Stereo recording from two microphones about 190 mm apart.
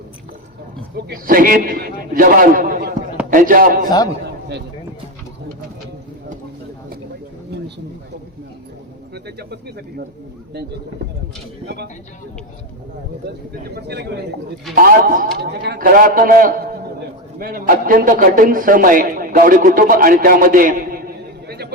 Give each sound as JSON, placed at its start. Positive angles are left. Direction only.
{"t": 1.0, "sound": "a man's voice", "side_deg": -55}
{"t": 3.8, "sound": "a man's voice", "side_deg": 20}
{"t": 9.1, "sound": "speech", "side_deg": -60}
{"t": 13.7, "sound": "speech", "side_deg": -60}
{"t": 14.8, "sound": "a man's voice", "side_deg": -50}